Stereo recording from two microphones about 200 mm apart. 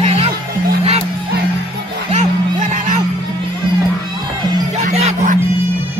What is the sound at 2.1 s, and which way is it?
Music, 35° right (ahead or behind).